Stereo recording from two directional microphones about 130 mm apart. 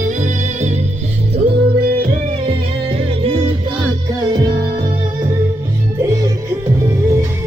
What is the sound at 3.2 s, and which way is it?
Music, 45° right (ahead or behind).